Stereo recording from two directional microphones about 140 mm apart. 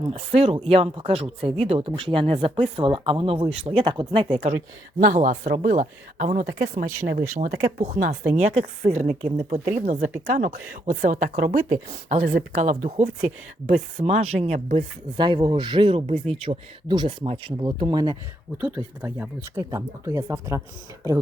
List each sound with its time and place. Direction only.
0.1 s speech: 45° right (ahead or behind)
4.9 s speech: 65° right (ahead or behind)
8.3 s speech: 55° right (ahead or behind)
15.1 s speech: 35° right (ahead or behind)
16.9 s speech: 35° right (ahead or behind)
18.6 s speech: 15° right (ahead or behind)